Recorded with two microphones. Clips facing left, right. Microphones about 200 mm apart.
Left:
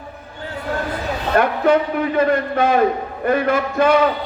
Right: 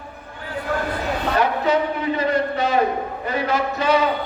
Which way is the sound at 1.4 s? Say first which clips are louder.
Left 5 dB; 50° left (ahead or behind).